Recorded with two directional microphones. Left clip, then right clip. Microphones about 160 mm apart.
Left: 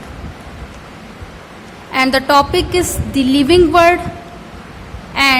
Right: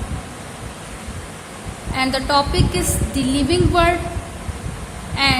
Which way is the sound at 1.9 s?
35° left (ahead or behind).